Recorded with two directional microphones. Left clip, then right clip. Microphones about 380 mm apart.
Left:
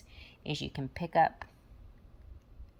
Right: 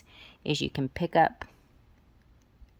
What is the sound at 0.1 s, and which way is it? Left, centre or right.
Speech, centre.